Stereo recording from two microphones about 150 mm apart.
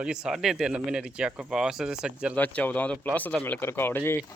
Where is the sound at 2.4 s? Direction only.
10° left (ahead or behind).